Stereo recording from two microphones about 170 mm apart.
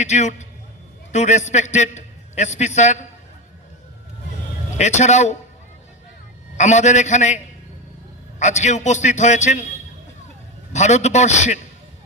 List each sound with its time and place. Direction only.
0.0 s a man's voice: 45° left (ahead or behind)
4.8 s a man's voice: 45° left (ahead or behind)
6.6 s a man's voice: 45° left (ahead or behind)
10.7 s a man's voice: 45° left (ahead or behind)